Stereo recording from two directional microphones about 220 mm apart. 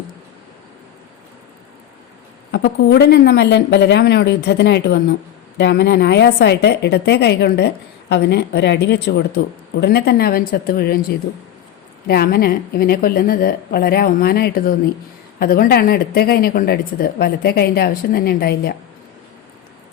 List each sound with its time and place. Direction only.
2.5 s a woman's voice: 50° left (ahead or behind)
12.0 s a woman's voice: 45° left (ahead or behind)